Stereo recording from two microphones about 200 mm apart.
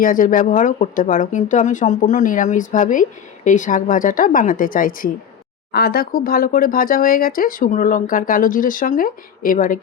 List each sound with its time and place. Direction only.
0.0 s speech: 45° left (ahead or behind)